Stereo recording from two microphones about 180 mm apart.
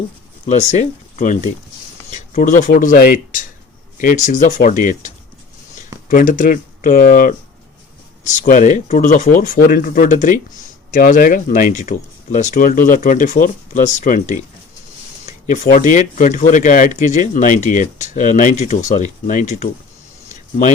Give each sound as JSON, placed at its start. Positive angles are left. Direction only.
{"t": 0.4, "sound": "speech", "side_deg": 40}